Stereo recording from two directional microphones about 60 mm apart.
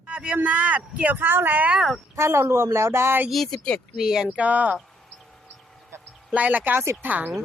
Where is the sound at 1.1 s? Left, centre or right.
Right.